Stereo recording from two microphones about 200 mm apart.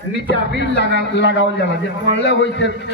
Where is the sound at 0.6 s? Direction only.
60° left (ahead or behind).